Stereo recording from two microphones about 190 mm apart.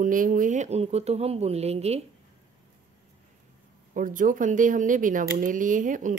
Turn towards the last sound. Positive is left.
turn(degrees=-45)  # may be behind; listen again after turning